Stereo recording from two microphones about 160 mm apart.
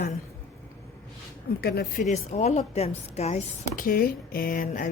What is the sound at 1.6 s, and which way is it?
Speech, 85° left.